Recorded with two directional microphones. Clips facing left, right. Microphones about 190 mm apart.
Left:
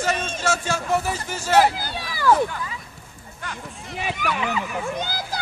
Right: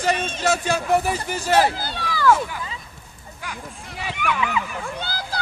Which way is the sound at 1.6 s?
15° left (ahead or behind).